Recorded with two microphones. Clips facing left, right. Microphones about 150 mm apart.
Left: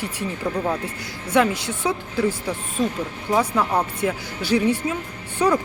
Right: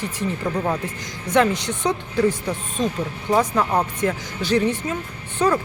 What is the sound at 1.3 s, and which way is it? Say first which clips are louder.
Speech: right 1 dB; 5° left (ahead or behind).